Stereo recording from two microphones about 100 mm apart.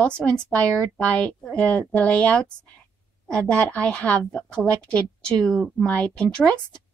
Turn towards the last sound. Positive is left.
turn(degrees=10)  # may be behind; listen again after turning